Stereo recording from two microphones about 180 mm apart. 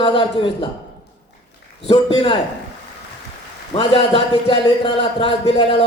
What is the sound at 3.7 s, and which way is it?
A man's voice, 30° left (ahead or behind).